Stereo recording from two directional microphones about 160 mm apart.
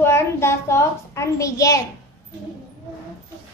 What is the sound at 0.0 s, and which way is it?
A child's voice, 15° left (ahead or behind).